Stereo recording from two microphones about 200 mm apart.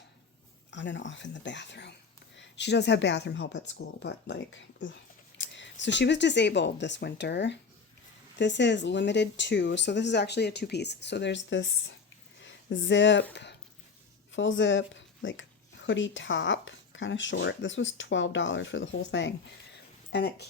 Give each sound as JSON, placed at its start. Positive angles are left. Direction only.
{"t": 0.7, "sound": "speech", "side_deg": 65}
{"t": 5.4, "sound": "a sound", "side_deg": 65}
{"t": 5.8, "sound": "speech", "side_deg": 60}
{"t": 13.3, "sound": "a sound", "side_deg": 60}
{"t": 14.3, "sound": "speech", "side_deg": 70}
{"t": 20.1, "sound": "speech", "side_deg": 55}